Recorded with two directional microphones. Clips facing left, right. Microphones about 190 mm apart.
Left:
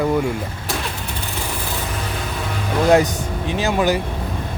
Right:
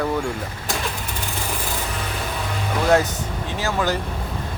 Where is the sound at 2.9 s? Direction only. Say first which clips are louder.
Left 3 dB; 15° left (ahead or behind).